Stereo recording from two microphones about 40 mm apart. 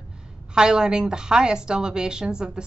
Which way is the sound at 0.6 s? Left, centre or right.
Centre.